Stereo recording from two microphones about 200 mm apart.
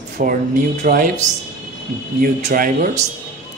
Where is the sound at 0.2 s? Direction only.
40° right (ahead or behind).